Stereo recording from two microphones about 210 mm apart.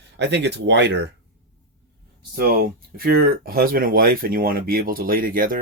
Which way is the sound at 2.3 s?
45° right (ahead or behind).